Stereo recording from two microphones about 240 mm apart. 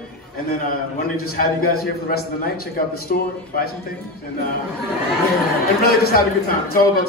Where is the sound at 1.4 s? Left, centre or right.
Left.